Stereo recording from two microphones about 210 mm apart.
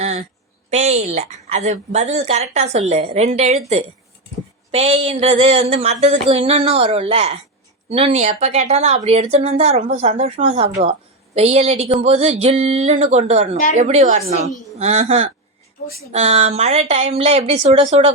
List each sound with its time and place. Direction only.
0.7 s a woman's voice: 30° right (ahead or behind)
4.7 s a woman's voice: 30° right (ahead or behind)